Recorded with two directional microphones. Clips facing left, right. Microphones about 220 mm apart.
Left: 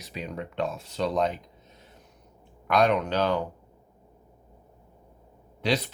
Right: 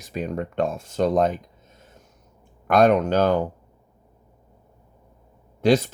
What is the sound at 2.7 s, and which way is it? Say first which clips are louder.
Speech: right 6 dB; 50° right (ahead or behind).